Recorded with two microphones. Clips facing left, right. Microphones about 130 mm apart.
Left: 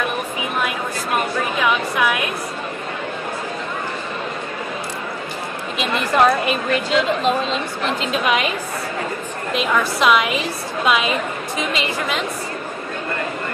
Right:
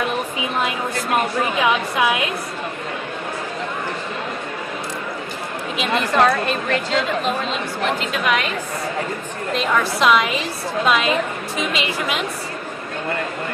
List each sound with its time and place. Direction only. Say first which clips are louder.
0.4 s a sound: left 1 dB; 20° right (ahead or behind)
1.6 s a woman's voice: even; 20° right (ahead or behind)
6.1 s a woman's voice: left 2 dB; 10° left (ahead or behind)
9.5 s a woman's voice: even; 5° left (ahead or behind)